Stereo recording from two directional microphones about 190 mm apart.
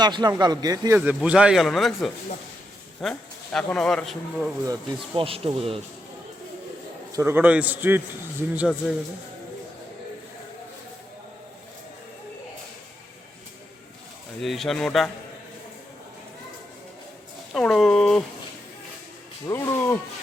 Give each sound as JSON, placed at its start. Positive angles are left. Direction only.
{"t": 0.0, "sound": "speech", "side_deg": -20}
{"t": 0.9, "sound": "speech", "side_deg": -5}
{"t": 5.1, "sound": "speech", "side_deg": -30}
{"t": 7.1, "sound": "a man's voice", "side_deg": -15}
{"t": 14.4, "sound": "speech", "side_deg": 0}
{"t": 17.5, "sound": "speech", "side_deg": 5}
{"t": 19.5, "sound": "speech", "side_deg": 15}